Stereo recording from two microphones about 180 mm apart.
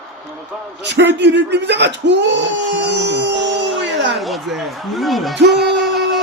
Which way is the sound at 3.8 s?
80° right.